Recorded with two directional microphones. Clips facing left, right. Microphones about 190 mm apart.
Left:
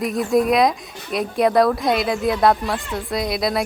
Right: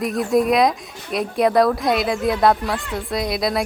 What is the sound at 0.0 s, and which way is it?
Speech, centre (ahead or behind).